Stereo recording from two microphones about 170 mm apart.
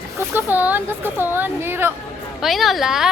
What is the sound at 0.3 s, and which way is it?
Speech, 10° right (ahead or behind).